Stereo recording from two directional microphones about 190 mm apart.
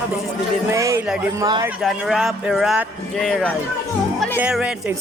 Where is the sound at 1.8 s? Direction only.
Centre (ahead or behind).